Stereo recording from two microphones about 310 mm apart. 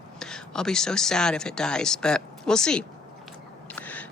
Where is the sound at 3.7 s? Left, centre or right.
Centre.